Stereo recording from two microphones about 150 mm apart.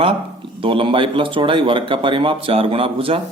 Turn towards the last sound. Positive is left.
turn(degrees=-35)  # may be behind; listen again after turning